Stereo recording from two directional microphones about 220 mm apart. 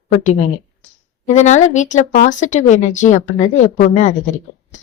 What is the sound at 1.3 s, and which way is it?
Speech, 30° left (ahead or behind).